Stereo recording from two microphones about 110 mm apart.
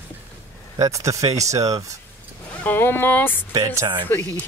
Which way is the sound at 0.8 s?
30° right (ahead or behind).